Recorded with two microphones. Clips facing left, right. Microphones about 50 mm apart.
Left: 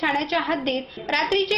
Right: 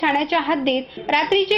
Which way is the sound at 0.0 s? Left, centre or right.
Right.